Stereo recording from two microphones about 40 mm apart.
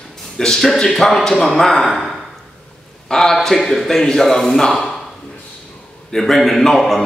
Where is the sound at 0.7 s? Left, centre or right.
Centre.